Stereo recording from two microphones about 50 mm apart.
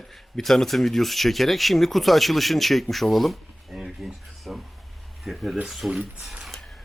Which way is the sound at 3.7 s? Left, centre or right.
Centre.